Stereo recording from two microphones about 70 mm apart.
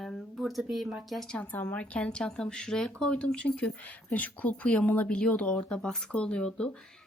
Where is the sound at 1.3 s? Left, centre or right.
Left.